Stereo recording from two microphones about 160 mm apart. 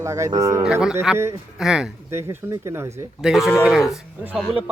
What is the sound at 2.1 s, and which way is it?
Speech, 15° right (ahead or behind).